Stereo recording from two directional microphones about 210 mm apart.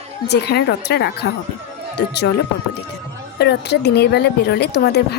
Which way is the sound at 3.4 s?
50° left (ahead or behind).